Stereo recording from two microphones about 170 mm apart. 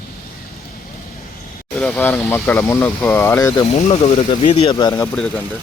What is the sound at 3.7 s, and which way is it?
Speech, 40° left (ahead or behind).